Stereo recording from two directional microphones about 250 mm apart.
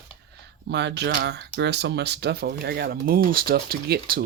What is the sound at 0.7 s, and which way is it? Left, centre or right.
Speech, right.